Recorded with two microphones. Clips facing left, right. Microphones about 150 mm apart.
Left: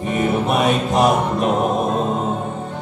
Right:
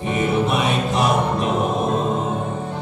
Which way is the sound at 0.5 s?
45° left (ahead or behind).